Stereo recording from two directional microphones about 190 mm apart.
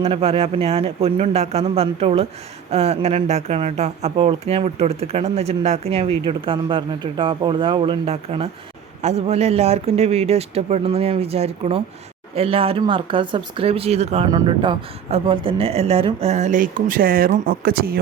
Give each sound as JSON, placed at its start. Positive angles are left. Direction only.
{"t": 0.0, "sound": "speech", "side_deg": -30}
{"t": 14.3, "sound": "speech", "side_deg": -20}